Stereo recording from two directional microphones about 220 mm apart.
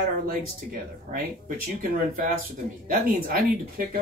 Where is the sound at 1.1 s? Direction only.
40° right (ahead or behind).